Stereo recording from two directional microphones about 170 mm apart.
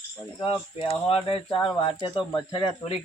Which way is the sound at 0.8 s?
35° left (ahead or behind).